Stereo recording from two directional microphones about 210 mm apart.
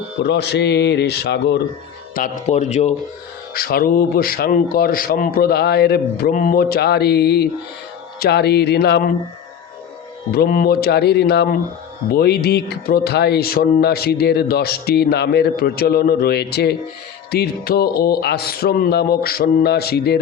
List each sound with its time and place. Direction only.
0.3 s speech: 55° left (ahead or behind)
2.1 s speech: 35° left (ahead or behind)
3.5 s speech: 45° left (ahead or behind)
10.3 s speech: 45° left (ahead or behind)